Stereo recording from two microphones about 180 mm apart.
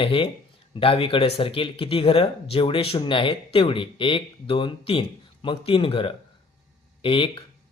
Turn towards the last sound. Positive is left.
turn(degrees=30)  # may be behind; listen again after turning